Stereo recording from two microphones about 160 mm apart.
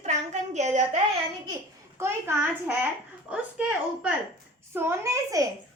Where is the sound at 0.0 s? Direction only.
45° right (ahead or behind).